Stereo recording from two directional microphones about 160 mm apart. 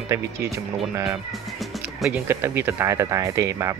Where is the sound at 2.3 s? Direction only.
15° right (ahead or behind).